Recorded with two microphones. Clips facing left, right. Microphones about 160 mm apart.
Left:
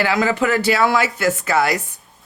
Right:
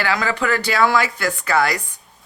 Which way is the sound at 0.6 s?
5° left (ahead or behind).